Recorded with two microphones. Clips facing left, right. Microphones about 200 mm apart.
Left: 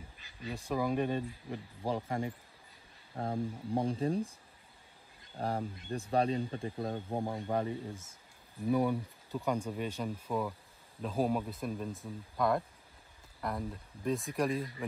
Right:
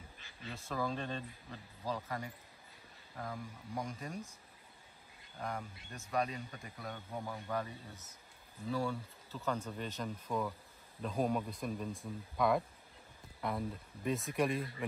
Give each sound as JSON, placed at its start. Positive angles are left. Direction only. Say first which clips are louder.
{"t": 0.4, "sound": "speech", "louder": "left 5 dB", "side_deg": 15}
{"t": 1.9, "sound": "speech", "louder": "left 6 dB", "side_deg": 25}
{"t": 5.4, "sound": "speech", "louder": "left 7 dB", "side_deg": 35}